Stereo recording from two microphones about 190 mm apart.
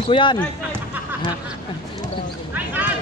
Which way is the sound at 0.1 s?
25° left (ahead or behind).